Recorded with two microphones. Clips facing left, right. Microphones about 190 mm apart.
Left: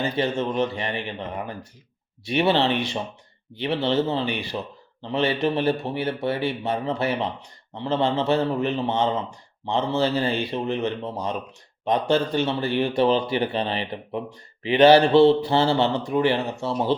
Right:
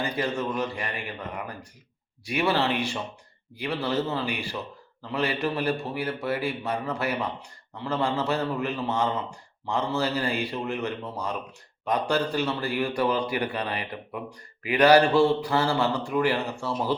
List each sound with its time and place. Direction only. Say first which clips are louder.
0.0 s a man's voice: left 4 dB; 25° left (ahead or behind)